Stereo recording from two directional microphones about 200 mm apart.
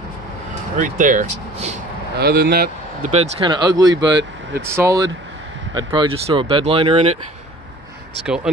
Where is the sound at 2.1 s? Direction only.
50° right (ahead or behind).